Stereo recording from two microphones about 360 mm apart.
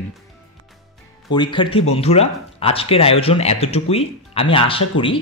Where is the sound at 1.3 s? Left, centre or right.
Centre.